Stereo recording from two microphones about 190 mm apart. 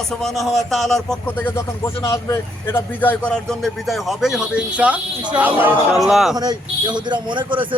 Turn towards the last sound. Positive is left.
turn(degrees=-25)  # may be behind; listen again after turning